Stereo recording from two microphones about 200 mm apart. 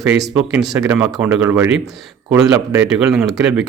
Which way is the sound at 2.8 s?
5° right (ahead or behind).